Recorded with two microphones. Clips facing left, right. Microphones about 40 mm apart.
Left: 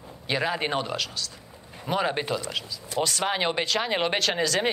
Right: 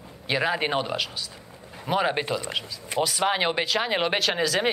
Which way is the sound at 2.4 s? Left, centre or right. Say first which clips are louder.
Right 1 dB; centre.